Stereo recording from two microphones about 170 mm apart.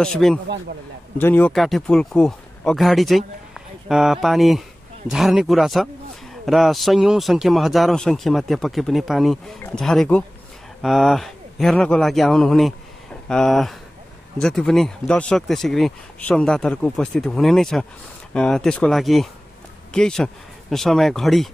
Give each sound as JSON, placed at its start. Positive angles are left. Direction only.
{"t": 0.0, "sound": "a man's voice", "side_deg": 5}